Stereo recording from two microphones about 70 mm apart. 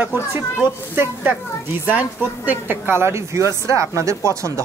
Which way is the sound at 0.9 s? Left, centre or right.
Right.